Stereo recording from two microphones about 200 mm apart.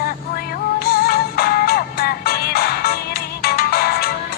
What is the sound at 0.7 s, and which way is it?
Music, 50° left (ahead or behind).